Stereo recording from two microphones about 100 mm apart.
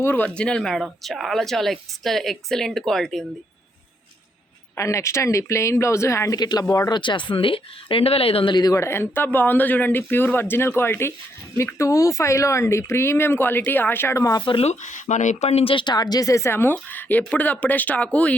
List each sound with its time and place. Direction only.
0.0 s speech: 15° left (ahead or behind)
4.7 s speech: 30° left (ahead or behind)
7.0 s speech: 55° left (ahead or behind); by 8.5 s 70° left (ahead or behind)
8.7 s speech: 25° left (ahead or behind)
14.4 s speech: 75° left (ahead or behind)
15.4 s speech: 90° left; by 18.3 s 15° left (ahead or behind)